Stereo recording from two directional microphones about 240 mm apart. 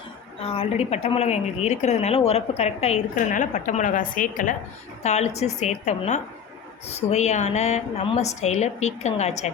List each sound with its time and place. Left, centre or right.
0.3 s a woman's voice: left